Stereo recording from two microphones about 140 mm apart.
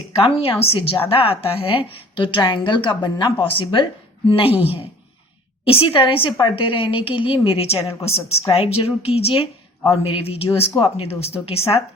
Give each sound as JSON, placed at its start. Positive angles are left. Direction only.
{"t": 0.2, "sound": "a woman's voice", "side_deg": 40}